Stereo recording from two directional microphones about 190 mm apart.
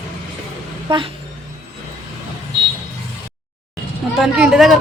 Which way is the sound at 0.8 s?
25° right (ahead or behind).